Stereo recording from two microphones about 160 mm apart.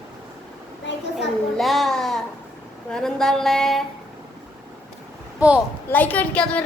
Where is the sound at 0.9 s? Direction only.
90° left.